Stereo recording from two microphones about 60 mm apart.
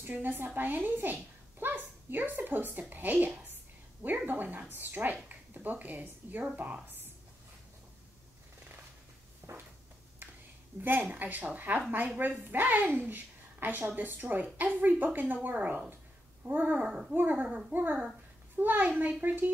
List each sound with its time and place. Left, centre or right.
0.0 s a woman's voice: right
6.5 s babbling: right
9.4 s a sound: right
10.8 s speech: right
16.4 s babbling: right
17.1 s speech: right
17.5 s a child's voice: centre
17.7 s babbling: right
18.6 s speech: right